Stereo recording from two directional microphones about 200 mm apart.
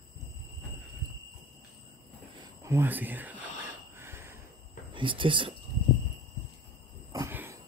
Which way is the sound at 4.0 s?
10° right (ahead or behind).